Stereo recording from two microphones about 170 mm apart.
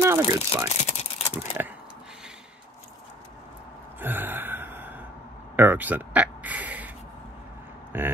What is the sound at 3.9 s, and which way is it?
Gasp, 10° right (ahead or behind).